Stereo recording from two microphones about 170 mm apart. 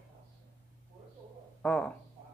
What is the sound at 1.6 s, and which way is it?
Speech, 5° left (ahead or behind).